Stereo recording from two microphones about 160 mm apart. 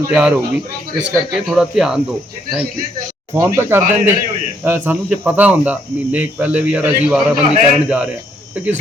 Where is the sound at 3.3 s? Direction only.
15° right (ahead or behind).